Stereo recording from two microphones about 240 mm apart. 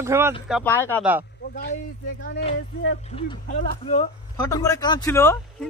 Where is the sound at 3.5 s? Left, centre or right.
Left.